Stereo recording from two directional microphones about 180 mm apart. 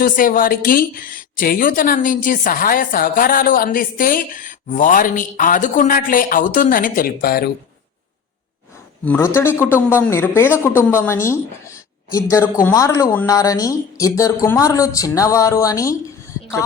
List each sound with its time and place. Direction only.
0.0 s a woman's voice: 50° left (ahead or behind)
9.0 s a man's voice: 15° left (ahead or behind)